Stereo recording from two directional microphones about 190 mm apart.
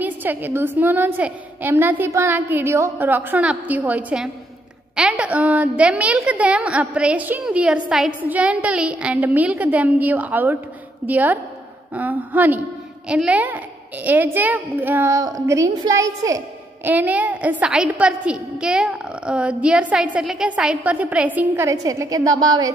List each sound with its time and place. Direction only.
0.0 s a child's voice: 10° right (ahead or behind)